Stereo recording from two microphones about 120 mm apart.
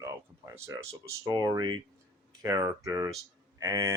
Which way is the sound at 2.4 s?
25° right (ahead or behind).